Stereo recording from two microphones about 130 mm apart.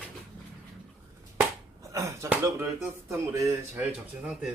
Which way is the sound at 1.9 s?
20° right (ahead or behind).